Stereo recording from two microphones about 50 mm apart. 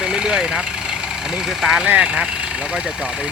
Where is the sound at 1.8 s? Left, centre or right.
Right.